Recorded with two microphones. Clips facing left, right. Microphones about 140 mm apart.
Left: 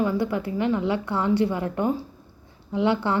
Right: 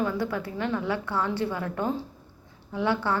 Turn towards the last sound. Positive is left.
turn(degrees=20)  # may be behind; listen again after turning